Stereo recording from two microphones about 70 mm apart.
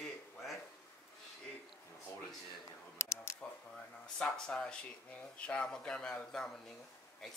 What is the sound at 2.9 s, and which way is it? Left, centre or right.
Camera, left.